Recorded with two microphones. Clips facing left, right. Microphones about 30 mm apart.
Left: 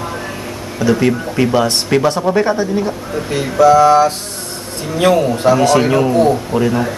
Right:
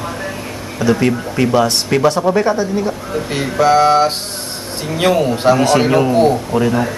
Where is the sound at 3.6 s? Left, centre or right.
Right.